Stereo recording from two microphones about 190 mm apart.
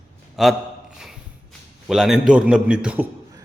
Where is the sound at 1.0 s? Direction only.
Centre (ahead or behind).